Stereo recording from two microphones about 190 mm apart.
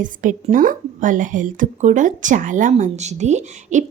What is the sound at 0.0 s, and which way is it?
A woman's voice, 45° right (ahead or behind).